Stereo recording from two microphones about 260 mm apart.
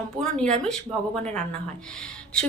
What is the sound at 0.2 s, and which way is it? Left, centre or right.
Speech, centre.